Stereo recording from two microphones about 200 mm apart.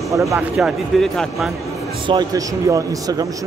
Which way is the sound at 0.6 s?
Centre (ahead or behind).